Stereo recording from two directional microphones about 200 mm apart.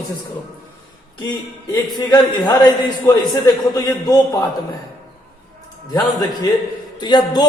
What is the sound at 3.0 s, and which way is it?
A man's voice, 20° left (ahead or behind).